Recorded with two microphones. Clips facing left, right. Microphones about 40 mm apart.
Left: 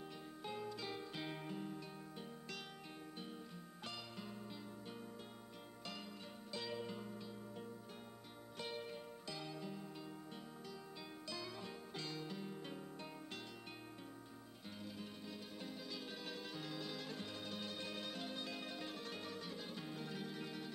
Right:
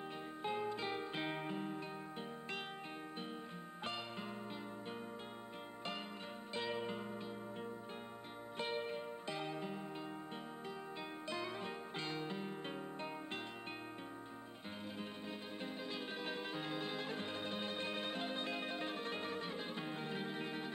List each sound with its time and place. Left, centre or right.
0.4 s music: right
3.8 s music: right
6.5 s music: right
8.5 s music: right
11.2 s music: right
15.6 s music: right